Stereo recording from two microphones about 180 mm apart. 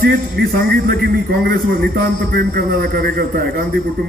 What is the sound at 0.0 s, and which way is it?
A man's voice, 50° right (ahead or behind).